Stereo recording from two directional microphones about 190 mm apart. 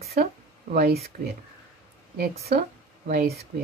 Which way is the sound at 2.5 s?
50° right (ahead or behind).